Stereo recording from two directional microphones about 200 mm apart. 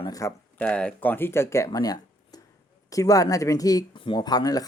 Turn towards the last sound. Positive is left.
turn(degrees=20)  # may be behind; listen again after turning